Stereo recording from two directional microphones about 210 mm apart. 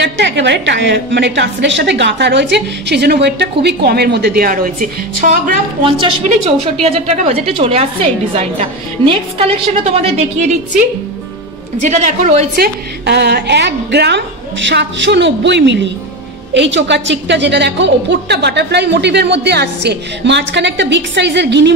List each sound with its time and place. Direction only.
0.2 s a woman's voice: 55° right (ahead or behind); by 5.4 s 40° right (ahead or behind)
5.9 s a woman's voice: 25° right (ahead or behind)
11.8 s a woman's voice: 35° right (ahead or behind)
12.5 s a woman's voice: 50° right (ahead or behind)